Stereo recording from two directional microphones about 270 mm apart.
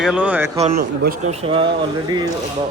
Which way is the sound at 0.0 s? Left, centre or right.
Centre.